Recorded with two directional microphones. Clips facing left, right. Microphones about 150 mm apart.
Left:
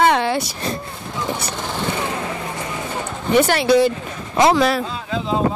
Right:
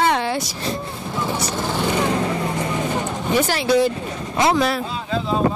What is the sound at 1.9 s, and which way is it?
Vehicle, 25° right (ahead or behind).